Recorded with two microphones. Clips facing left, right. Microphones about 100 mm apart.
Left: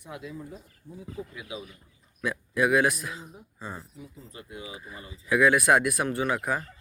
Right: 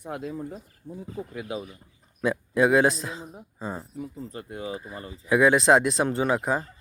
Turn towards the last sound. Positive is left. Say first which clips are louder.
# right 3 dB
turn(degrees=-25)  # may be behind; listen again after turning